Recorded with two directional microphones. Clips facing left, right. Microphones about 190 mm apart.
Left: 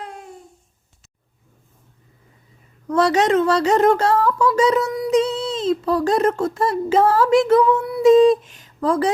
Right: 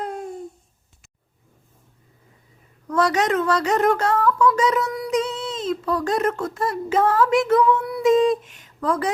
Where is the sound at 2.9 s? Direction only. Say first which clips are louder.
Left 4 dB; 30° left (ahead or behind).